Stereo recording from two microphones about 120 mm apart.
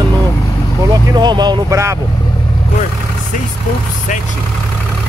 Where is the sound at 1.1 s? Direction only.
35° right (ahead or behind).